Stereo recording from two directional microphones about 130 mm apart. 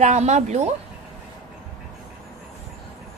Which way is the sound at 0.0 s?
60° right (ahead or behind).